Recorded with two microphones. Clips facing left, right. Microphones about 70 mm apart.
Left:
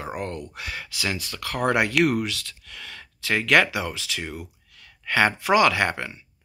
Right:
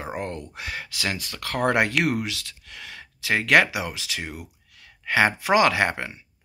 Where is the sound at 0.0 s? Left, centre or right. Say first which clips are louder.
Even; right.